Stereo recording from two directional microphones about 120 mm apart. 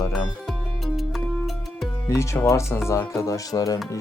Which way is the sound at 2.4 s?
25° left (ahead or behind).